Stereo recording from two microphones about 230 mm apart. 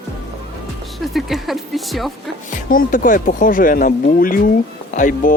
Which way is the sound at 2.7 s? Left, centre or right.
Left.